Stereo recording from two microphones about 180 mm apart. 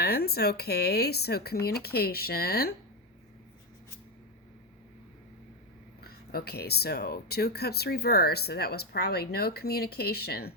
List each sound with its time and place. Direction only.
0.0 s speech: 60° left (ahead or behind)
6.0 s speech: 60° left (ahead or behind)